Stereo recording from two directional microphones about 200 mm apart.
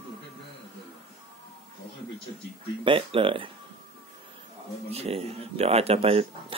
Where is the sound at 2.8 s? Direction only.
25° right (ahead or behind).